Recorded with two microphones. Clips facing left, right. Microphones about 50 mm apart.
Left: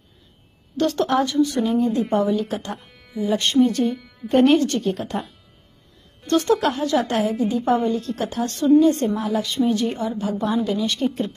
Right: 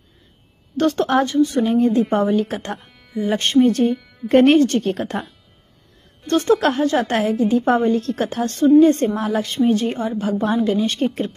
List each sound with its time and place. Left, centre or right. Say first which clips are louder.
0.7 s a woman's voice: right 2 dB; right
4.8 s speech: right 2 dB; right
6.2 s a woman's voice: right 2 dB; right
7.2 s a woman's voice: right 3 dB; right